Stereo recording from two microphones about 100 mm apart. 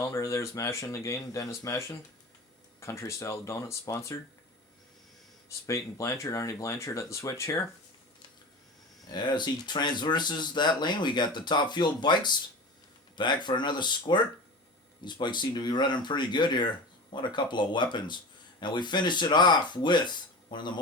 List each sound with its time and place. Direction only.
0.0 s speech: 30° left (ahead or behind)
5.6 s speech: 30° left (ahead or behind)
9.1 s speech: 50° left (ahead or behind)